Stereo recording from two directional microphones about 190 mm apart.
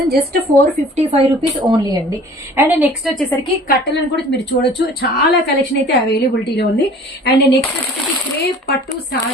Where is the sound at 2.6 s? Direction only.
10° right (ahead or behind).